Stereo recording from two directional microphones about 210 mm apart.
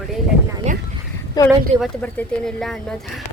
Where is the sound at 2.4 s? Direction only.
Centre (ahead or behind).